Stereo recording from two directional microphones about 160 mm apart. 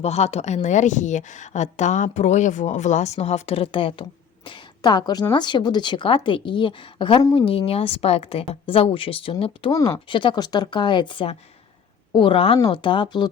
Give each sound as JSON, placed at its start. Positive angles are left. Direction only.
{"t": 0.0, "sound": "a woman's voice", "side_deg": 40}
{"t": 9.7, "sound": "speech", "side_deg": 20}
{"t": 10.1, "sound": "a woman's voice", "side_deg": 30}